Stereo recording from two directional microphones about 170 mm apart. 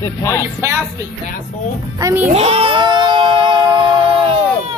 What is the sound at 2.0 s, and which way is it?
Speech, 20° right (ahead or behind).